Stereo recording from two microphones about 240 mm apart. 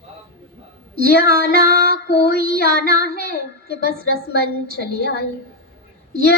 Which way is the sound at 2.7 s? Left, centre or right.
Right.